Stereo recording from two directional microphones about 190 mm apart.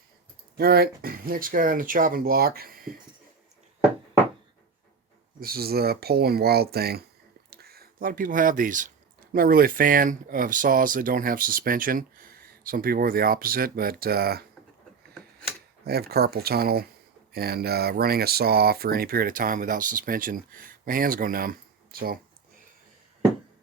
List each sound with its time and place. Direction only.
0.5 s speech: 55° right (ahead or behind)
5.4 s speech: 50° right (ahead or behind)
15.8 s speech: 55° right (ahead or behind)